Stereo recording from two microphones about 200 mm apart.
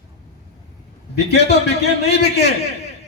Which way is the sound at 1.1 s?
55° left (ahead or behind).